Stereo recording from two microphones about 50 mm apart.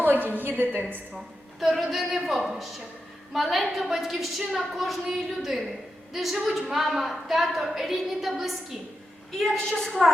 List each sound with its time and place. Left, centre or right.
0.0 s a woman's voice: right
1.6 s a woman's voice: centre
9.3 s a woman's voice: centre